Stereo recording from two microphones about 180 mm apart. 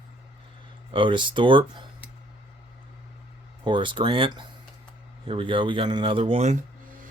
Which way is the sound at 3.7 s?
25° right (ahead or behind).